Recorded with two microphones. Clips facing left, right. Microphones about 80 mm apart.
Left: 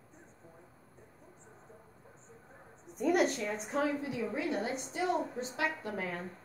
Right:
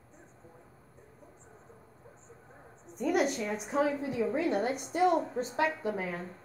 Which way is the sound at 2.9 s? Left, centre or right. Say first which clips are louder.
Even; centre.